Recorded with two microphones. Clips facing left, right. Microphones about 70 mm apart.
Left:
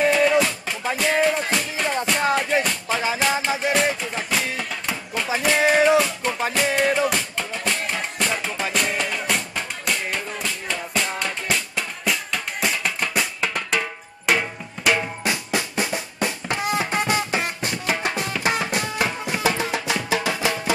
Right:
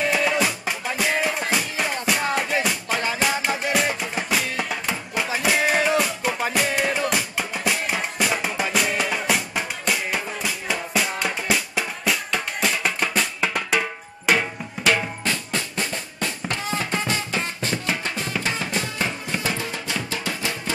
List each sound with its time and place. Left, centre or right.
0.1 s music: centre
19.6 s music: left